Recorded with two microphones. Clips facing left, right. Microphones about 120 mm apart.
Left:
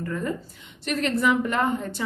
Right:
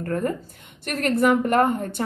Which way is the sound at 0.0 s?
55° right (ahead or behind).